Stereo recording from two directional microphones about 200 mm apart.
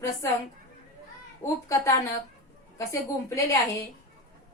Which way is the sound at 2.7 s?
15° left (ahead or behind).